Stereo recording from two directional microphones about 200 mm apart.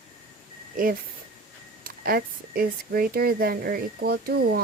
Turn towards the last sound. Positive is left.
turn(degrees=-50)  # may be behind; listen again after turning